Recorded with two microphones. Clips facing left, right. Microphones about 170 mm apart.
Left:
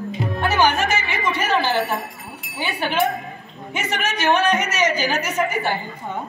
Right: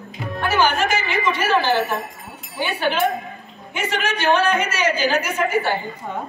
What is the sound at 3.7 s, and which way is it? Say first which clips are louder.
A woman's voice: right 1 dB; 20° left (ahead or behind).